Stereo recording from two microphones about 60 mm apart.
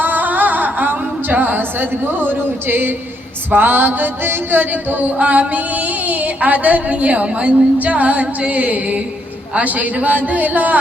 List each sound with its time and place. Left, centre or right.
0.0 s singing: right
3.5 s music: right